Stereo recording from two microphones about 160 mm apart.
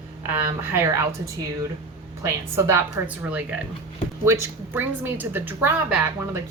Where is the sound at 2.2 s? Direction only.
15° right (ahead or behind).